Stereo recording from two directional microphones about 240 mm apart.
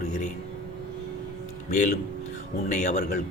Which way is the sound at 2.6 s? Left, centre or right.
Left.